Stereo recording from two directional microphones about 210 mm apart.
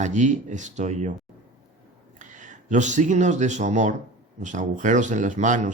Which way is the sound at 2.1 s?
35° right (ahead or behind).